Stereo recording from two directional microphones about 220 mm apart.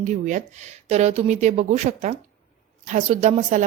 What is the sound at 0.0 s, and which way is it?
A woman's voice, 35° right (ahead or behind).